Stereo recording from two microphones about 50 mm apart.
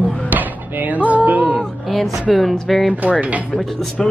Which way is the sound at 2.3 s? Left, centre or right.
Centre.